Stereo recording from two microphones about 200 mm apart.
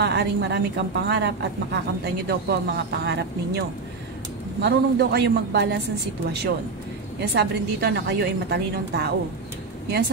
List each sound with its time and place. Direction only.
0.0 s a woman's voice: 60° right (ahead or behind)
7.2 s a woman's voice: 55° right (ahead or behind)